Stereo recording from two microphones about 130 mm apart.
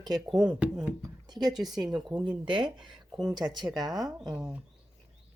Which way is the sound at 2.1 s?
10° right (ahead or behind).